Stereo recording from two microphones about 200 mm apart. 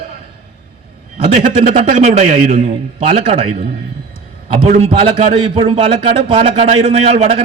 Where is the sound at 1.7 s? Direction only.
35° right (ahead or behind).